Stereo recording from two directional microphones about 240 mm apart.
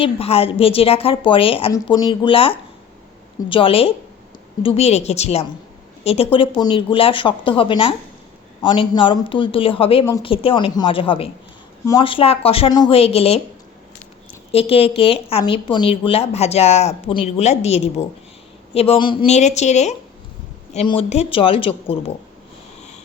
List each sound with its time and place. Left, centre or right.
0.0 s a woman's voice: left
14.5 s a woman's voice: left